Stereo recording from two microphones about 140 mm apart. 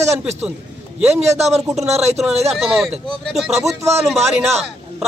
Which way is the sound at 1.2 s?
50° right (ahead or behind).